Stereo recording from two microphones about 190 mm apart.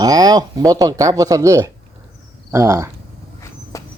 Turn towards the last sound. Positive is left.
turn(degrees=15)  # may be behind; listen again after turning